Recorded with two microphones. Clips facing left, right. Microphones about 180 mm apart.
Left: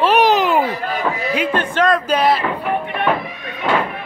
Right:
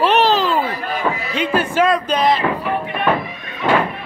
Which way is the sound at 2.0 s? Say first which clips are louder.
Left 1 dB; 10° left (ahead or behind).